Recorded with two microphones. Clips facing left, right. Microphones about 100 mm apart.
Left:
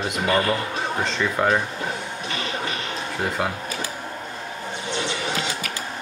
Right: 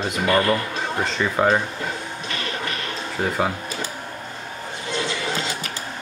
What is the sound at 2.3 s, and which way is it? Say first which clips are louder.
Music: even; 20° left (ahead or behind).